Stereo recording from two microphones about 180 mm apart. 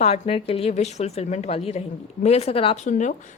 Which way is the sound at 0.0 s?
35° left (ahead or behind).